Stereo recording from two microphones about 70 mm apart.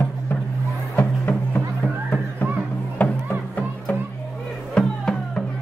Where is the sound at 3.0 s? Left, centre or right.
Left.